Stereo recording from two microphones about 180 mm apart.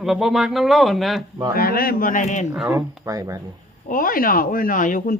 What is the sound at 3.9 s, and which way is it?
Speech, 50° left (ahead or behind).